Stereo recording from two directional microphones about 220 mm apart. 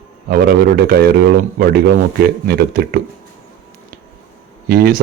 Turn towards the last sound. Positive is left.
turn(degrees=-40)  # may be behind; listen again after turning